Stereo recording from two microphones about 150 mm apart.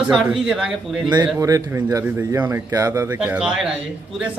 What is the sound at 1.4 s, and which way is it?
A man's voice, 25° right (ahead or behind).